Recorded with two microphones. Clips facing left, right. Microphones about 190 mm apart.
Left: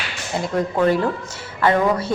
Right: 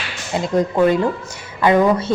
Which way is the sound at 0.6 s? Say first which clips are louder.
Right 3 dB; 15° right (ahead or behind).